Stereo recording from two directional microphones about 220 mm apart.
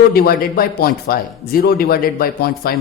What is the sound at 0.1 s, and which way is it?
A man's voice, 45° left (ahead or behind).